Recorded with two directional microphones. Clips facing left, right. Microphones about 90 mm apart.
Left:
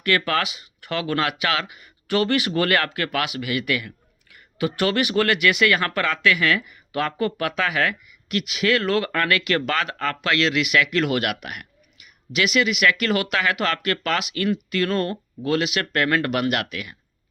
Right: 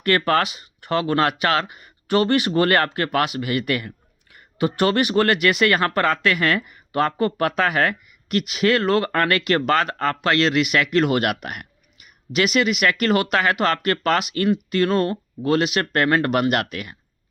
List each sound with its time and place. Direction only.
0.0 s speech: 40° right (ahead or behind)